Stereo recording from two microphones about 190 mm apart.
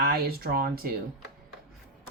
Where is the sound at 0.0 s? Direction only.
55° right (ahead or behind).